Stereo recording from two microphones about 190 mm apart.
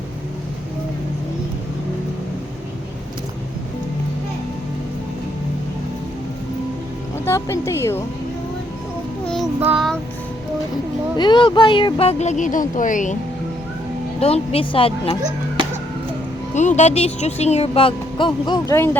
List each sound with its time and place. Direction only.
7.3 s speech: 15° left (ahead or behind)
9.2 s child singing: centre (ahead or behind)
9.6 s child singing: 10° right (ahead or behind)
11.2 s speech: 25° left (ahead or behind); by 13.1 s 40° left (ahead or behind)
14.2 s a woman's voice: 30° left (ahead or behind)
16.6 s speech: 40° left (ahead or behind); by 18.9 s 20° left (ahead or behind)